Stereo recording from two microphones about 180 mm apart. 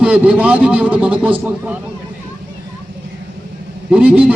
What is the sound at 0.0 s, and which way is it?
A man's voice, 5° right (ahead or behind).